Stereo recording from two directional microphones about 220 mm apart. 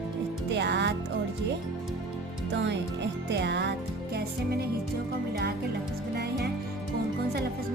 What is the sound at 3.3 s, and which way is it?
Music, 50° right (ahead or behind).